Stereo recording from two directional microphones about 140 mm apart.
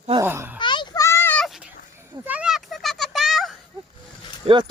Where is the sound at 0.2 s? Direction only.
15° right (ahead or behind).